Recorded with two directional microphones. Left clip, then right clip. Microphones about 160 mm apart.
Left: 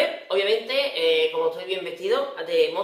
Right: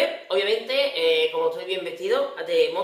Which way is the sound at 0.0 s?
10° right (ahead or behind).